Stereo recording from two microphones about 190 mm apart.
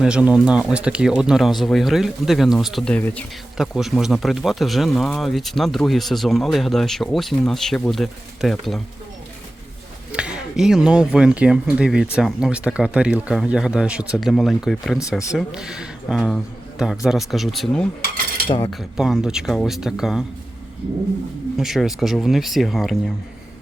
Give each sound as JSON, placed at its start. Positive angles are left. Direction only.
{"t": 0.0, "sound": "speech", "side_deg": -5}
{"t": 10.1, "sound": "speech", "side_deg": -5}
{"t": 21.6, "sound": "speech", "side_deg": 0}